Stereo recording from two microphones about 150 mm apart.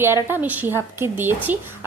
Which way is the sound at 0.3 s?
15° right (ahead or behind).